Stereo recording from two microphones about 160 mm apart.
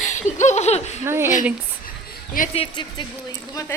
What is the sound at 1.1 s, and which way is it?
Speech, 15° right (ahead or behind).